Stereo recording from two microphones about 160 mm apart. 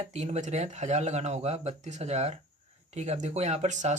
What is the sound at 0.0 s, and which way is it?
Speech, 40° right (ahead or behind).